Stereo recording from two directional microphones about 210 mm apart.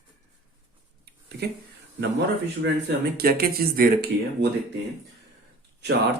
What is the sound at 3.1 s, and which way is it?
Speech, 45° right (ahead or behind).